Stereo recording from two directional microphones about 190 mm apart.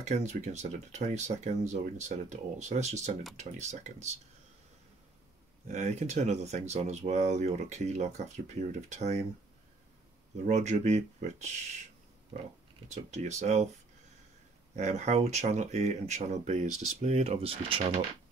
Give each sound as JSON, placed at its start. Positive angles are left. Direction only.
{"t": 0.0, "sound": "speech", "side_deg": -35}
{"t": 5.7, "sound": "speech", "side_deg": -35}
{"t": 10.4, "sound": "speech", "side_deg": -35}
{"t": 14.8, "sound": "speech", "side_deg": -35}